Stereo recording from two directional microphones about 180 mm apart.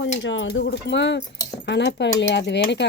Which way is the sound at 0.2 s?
90° left.